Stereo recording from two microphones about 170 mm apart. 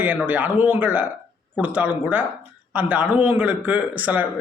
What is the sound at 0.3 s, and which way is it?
Speech, 10° right (ahead or behind).